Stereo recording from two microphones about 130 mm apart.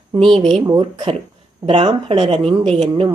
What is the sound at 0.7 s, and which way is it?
Speech, 30° right (ahead or behind).